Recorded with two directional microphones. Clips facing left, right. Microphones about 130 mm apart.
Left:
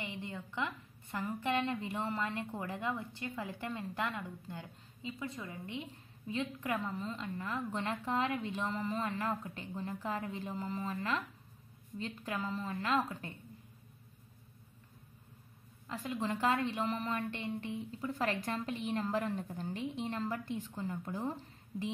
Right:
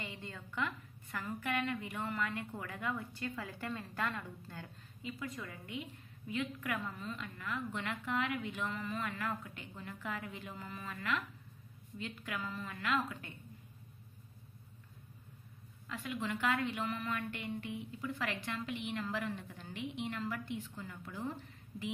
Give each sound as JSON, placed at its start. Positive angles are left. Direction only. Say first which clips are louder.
{"t": 0.0, "sound": "a woman's voice", "louder": "left 4 dB", "side_deg": 20}
{"t": 15.9, "sound": "a woman's voice", "louder": "left 3 dB", "side_deg": 35}